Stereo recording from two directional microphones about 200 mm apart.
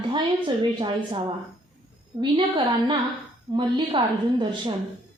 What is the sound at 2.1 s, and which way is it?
Speech, 25° right (ahead or behind).